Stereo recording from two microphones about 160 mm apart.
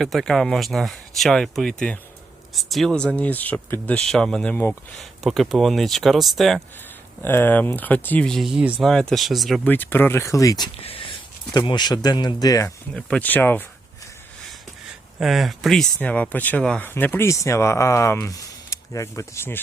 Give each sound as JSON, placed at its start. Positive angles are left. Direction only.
{"t": 0.0, "sound": "speech", "side_deg": 0}
{"t": 4.9, "sound": "speech", "side_deg": 0}
{"t": 7.2, "sound": "speech", "side_deg": 15}
{"t": 9.6, "sound": "speech", "side_deg": 10}
{"t": 10.8, "sound": "speech", "side_deg": 35}
{"t": 12.9, "sound": "speech", "side_deg": 5}
{"t": 15.2, "sound": "speech", "side_deg": 0}